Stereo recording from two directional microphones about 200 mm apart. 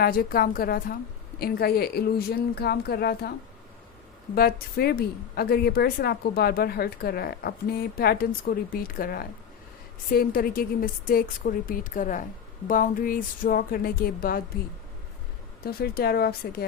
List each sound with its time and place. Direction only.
0.0 s a woman's voice: 50° left (ahead or behind)
4.4 s a woman's voice: 50° left (ahead or behind)
15.6 s a woman's voice: 50° left (ahead or behind)